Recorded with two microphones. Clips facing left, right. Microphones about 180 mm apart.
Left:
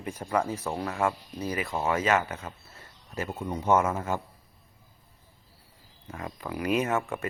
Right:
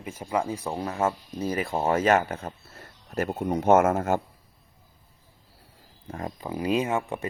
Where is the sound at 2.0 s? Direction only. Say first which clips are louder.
Right 5 dB; 50° right (ahead or behind).